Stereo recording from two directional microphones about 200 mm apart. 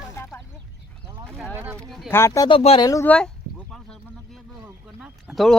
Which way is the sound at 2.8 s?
15° left (ahead or behind).